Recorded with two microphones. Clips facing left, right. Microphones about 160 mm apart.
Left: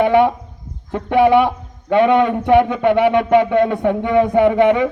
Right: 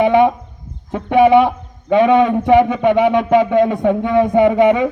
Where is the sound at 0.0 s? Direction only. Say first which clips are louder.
Right 1 dB; 15° right (ahead or behind).